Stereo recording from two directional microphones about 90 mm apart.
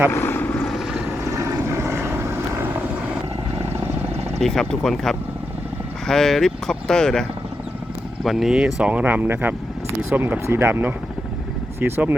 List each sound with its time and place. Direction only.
0.1 s vehicle: 25° left (ahead or behind)
1.3 s vehicle: 35° right (ahead or behind)
4.4 s speech: 5° left (ahead or behind); by 12.1 s 25° right (ahead or behind)